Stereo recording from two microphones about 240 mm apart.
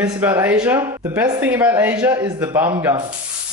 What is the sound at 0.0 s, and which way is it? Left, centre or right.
Speech, centre.